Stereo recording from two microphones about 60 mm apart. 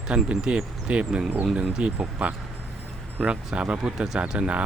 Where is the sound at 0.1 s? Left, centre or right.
Centre.